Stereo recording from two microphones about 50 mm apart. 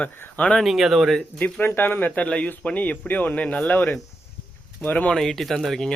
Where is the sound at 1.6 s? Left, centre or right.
Left.